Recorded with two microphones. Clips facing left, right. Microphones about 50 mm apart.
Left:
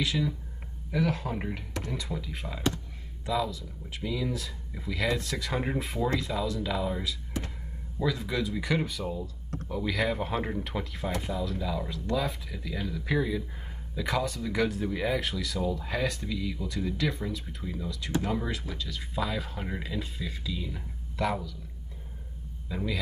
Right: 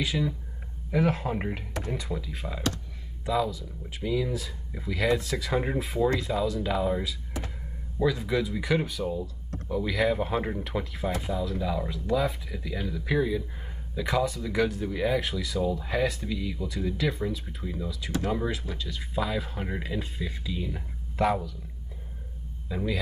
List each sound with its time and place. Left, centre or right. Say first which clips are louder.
0.0 s speech: right 1 dB; centre
0.9 s speech: right 3 dB; right
2.0 s speech: right 2 dB; centre; by 21.5 s right
22.7 s speech: right 3 dB; centre